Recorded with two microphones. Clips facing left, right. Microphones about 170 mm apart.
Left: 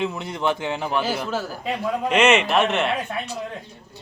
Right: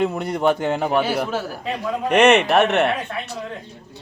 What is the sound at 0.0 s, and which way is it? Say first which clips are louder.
Speech: right 5 dB; 55° right (ahead or behind).